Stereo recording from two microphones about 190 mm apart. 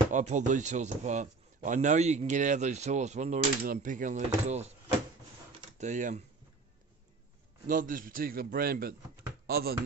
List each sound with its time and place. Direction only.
0.1 s a man's voice: 40° right (ahead or behind)
5.8 s a man's voice: 40° right (ahead or behind)
7.6 s a man's voice: 45° right (ahead or behind)